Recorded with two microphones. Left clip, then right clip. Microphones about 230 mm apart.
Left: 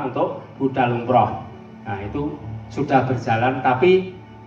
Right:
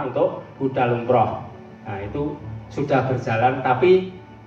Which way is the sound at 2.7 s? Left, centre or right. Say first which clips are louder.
Left 2 dB; left.